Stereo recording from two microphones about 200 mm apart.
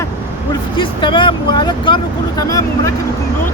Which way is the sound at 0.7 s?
25° left (ahead or behind).